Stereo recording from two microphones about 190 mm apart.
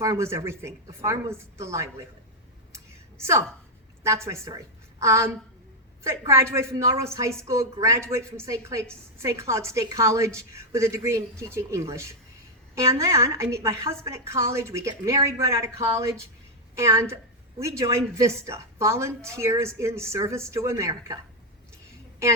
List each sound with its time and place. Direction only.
0.0 s a woman's voice: 15° right (ahead or behind)
2.7 s a sound: 15° right (ahead or behind)
4.0 s a woman's voice: 15° right (ahead or behind)